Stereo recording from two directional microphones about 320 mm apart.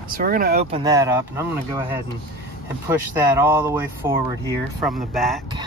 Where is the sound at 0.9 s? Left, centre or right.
Centre.